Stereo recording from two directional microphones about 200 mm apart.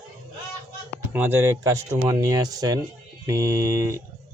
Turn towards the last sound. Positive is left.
turn(degrees=-15)  # may be behind; listen again after turning